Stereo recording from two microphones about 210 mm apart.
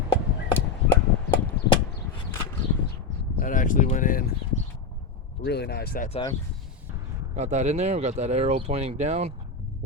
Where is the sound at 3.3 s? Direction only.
40° left (ahead or behind).